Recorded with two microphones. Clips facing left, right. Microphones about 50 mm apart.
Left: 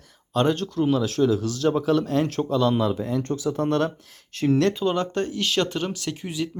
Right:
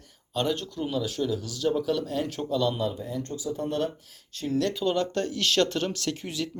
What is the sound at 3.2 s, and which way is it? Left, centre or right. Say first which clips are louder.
Speech: left 6 dB; left.